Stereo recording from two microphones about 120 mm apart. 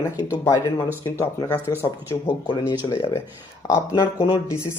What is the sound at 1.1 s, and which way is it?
Speech, 25° left (ahead or behind).